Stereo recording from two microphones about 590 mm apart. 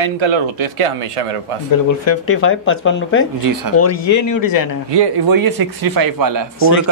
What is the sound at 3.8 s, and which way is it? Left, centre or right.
Speech, left.